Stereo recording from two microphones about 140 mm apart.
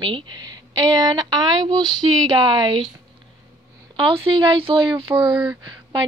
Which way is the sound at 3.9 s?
35° right (ahead or behind).